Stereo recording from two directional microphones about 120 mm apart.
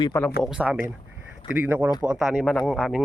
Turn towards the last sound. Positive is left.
turn(degrees=0)  # may be behind; listen again after turning